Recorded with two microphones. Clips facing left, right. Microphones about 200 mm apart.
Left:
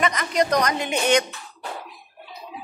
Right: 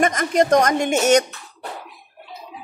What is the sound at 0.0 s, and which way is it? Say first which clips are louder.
Speech: right 4 dB; 50° right (ahead or behind).